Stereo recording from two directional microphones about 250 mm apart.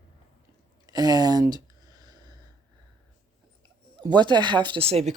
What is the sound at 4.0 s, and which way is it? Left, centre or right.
Speech, centre.